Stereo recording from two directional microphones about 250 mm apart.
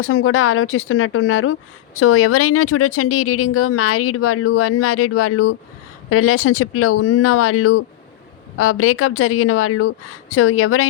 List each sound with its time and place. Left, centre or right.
0.0 s speech: left